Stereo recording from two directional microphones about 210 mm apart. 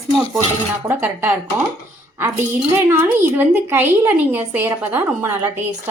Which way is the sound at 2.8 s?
10° right (ahead or behind).